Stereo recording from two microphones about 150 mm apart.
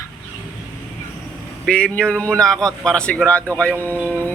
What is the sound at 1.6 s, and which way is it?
A man's voice, 5° left (ahead or behind).